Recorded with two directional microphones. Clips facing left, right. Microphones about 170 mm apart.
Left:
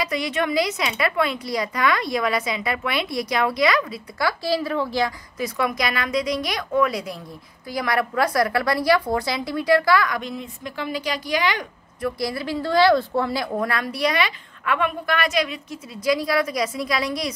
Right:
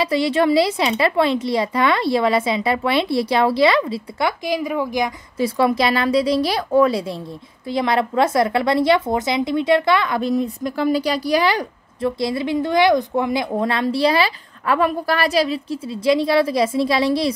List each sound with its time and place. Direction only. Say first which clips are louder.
0.0 s a woman's voice: right 7 dB; 30° right (ahead or behind)
5.4 s a woman's voice: right 7 dB; 30° right (ahead or behind)
10.3 s a woman's voice: right 11 dB; 40° right (ahead or behind)
12.2 s a woman's voice: right 7 dB; 20° right (ahead or behind)